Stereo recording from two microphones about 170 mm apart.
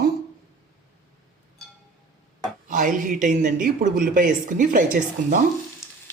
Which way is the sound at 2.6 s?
50° right (ahead or behind).